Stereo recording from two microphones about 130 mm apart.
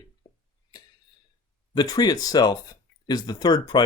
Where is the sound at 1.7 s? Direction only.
30° left (ahead or behind).